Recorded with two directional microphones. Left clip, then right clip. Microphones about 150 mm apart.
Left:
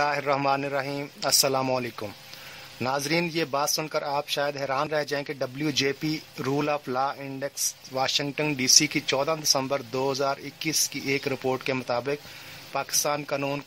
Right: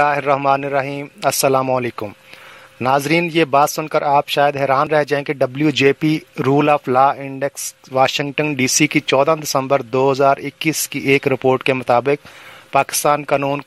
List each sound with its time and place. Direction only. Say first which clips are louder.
0.0 s a man's voice: right 9 dB; 40° right (ahead or behind); by 13.2 s 55° right (ahead or behind)